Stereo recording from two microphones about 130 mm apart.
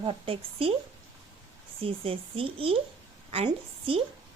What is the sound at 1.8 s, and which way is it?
A woman's voice, 45° right (ahead or behind).